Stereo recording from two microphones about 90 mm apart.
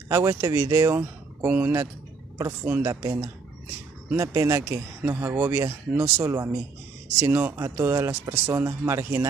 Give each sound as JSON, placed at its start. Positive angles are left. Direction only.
{"t": 0.1, "sound": "speech", "side_deg": -35}